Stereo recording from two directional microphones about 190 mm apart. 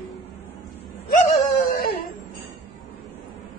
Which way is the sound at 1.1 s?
45° left (ahead or behind).